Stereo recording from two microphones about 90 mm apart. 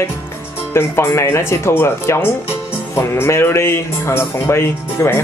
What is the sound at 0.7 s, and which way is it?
Speech, 30° left (ahead or behind).